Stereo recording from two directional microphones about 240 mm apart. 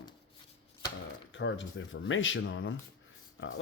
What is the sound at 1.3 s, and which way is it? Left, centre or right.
Speech, left.